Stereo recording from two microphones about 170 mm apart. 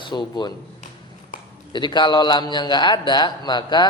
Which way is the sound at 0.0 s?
25° left (ahead or behind).